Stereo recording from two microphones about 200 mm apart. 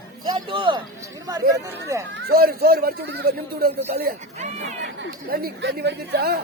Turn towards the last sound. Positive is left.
turn(degrees=-55)  # may be behind; listen again after turning